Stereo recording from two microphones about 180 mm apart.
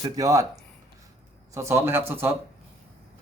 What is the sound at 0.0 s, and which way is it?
Speech, 20° right (ahead or behind).